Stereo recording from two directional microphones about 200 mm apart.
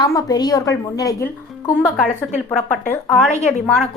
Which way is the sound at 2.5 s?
5° left (ahead or behind).